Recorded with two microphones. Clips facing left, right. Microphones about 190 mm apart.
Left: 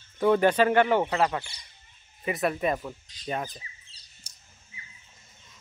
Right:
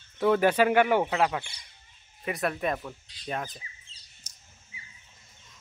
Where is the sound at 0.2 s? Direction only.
5° right (ahead or behind).